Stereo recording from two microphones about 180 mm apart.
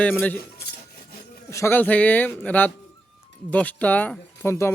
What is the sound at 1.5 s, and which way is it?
Speech, 15° left (ahead or behind).